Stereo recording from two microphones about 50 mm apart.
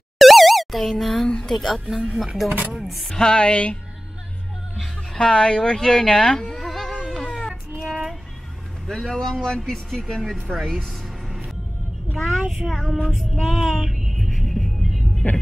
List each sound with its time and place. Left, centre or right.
0.2 s plop: centre
1.5 s music: centre
1.9 s speech: centre
2.7 s music: centre
3.2 s speech: centre
5.1 s speech: centre
7.1 s a sound: centre
8.8 s speech: centre
12.2 s child singing: centre
12.6 s music: centre